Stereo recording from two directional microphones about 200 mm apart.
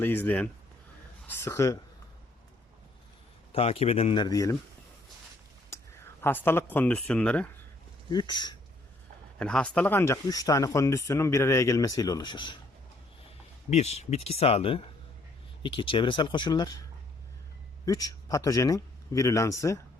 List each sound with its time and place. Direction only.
0.0 s speech: 10° left (ahead or behind)
3.5 s speech: 30° left (ahead or behind)
5.7 s speech: 10° left (ahead or behind)
8.1 s speech: 20° left (ahead or behind)
9.4 s speech: 5° left (ahead or behind); by 12.5 s 25° left (ahead or behind)
13.7 s speech: 35° left (ahead or behind)
17.8 s speech: 15° left (ahead or behind)